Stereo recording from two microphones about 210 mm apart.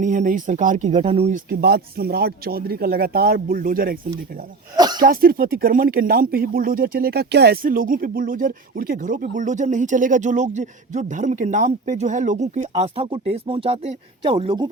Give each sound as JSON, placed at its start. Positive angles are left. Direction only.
{"t": 0.0, "sound": "speech", "side_deg": -35}
{"t": 1.5, "sound": "speech", "side_deg": -45}
{"t": 4.8, "sound": "speech", "side_deg": -20}
{"t": 5.0, "sound": "speech", "side_deg": -45}